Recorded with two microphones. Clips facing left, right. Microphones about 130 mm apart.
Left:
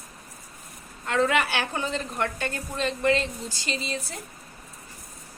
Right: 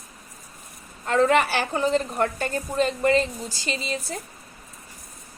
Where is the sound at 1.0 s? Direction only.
35° right (ahead or behind).